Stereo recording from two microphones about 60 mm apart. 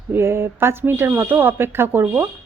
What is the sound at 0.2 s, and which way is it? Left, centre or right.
Speech, right.